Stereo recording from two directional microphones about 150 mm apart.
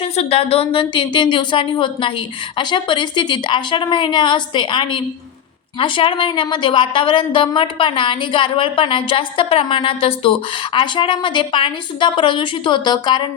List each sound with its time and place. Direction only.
0.0 s a woman's voice: 40° left (ahead or behind)